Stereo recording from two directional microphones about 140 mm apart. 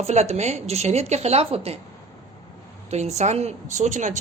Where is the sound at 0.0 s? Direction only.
50° right (ahead or behind).